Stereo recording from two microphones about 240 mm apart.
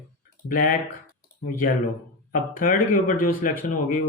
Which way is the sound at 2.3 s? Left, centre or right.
Left.